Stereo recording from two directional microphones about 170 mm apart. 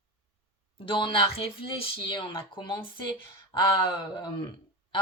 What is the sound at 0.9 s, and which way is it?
Speech, 30° left (ahead or behind).